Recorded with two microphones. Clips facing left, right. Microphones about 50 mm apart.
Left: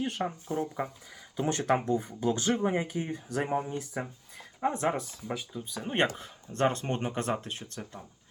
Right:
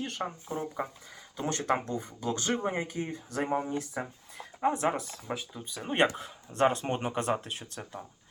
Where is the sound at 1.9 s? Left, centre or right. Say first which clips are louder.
Left 5 dB; centre.